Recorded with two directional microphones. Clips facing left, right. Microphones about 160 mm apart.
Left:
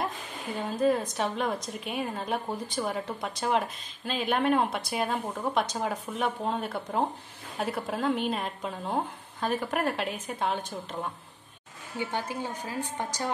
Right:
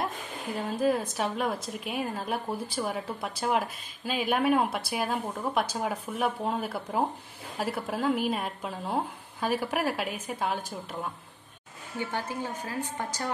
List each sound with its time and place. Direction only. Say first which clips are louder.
0.6 s a woman's voice: left 1 dB; centre (ahead or behind)
12.6 s a woman's voice: even; 20° left (ahead or behind)